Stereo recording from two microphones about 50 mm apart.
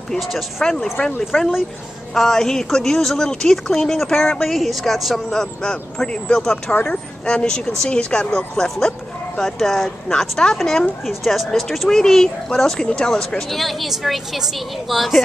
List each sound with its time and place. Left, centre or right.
0.2 s a woman's voice: centre
0.6 s a woman's voice: centre
5.3 s a woman's voice: centre